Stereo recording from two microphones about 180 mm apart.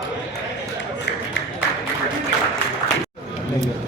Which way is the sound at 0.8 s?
80° left.